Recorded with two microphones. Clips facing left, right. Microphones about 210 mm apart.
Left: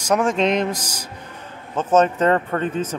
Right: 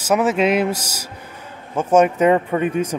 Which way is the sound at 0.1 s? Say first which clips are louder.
Right 2 dB; 5° right (ahead or behind).